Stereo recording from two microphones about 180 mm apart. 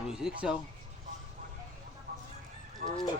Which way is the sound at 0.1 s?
5° right (ahead or behind).